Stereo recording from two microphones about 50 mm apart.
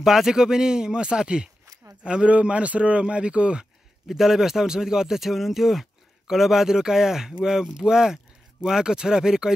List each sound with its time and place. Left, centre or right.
0.0 s a man's voice: centre
4.1 s speech: centre